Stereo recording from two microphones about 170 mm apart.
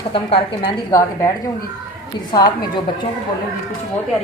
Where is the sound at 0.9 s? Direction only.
20° left (ahead or behind).